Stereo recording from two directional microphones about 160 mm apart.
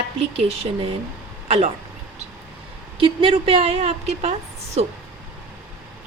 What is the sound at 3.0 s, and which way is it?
A woman's voice, 35° right (ahead or behind).